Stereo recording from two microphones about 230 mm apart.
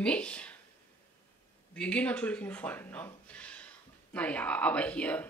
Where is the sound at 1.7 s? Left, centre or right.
Centre.